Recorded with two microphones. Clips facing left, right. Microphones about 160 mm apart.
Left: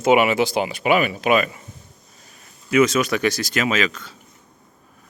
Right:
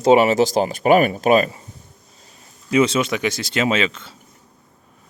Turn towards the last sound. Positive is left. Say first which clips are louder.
# right 2 dB
turn(degrees=-25)  # may be behind; listen again after turning